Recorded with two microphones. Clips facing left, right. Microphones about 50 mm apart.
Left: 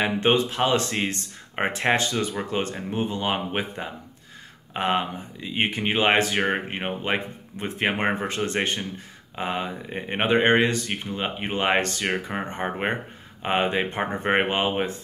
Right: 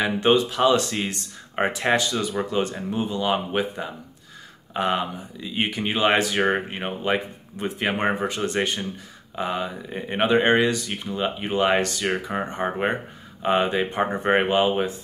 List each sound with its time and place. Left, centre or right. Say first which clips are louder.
0.0 s speech: right 2 dB; left
6.5 s speech: right 1 dB; left
7.0 s speech: right 2 dB; left